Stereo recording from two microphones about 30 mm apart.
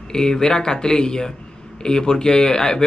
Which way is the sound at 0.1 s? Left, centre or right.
Left.